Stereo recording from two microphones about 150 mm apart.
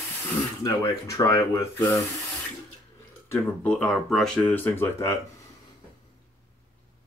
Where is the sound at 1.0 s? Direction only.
20° left (ahead or behind).